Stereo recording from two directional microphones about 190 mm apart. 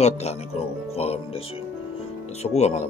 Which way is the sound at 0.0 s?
35° left (ahead or behind).